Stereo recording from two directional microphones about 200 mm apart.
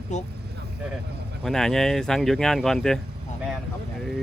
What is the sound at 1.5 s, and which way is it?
Speech, centre (ahead or behind).